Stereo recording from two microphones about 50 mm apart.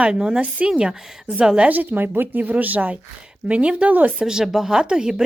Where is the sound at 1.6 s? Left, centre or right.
Right.